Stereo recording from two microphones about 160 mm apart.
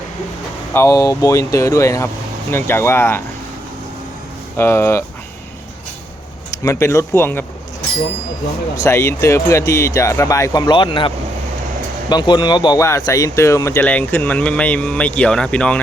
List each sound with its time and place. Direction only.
0.7 s speech: 20° left (ahead or behind)
4.5 s speech: 15° left (ahead or behind)
6.5 s speech: 20° left (ahead or behind)
8.7 s speech: 20° left (ahead or behind)